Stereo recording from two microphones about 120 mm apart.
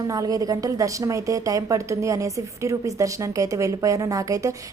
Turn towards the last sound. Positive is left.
turn(degrees=-25)  # may be behind; listen again after turning